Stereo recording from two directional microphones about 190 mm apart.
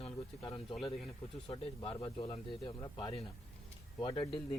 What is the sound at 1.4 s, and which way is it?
Speech, 30° left (ahead or behind).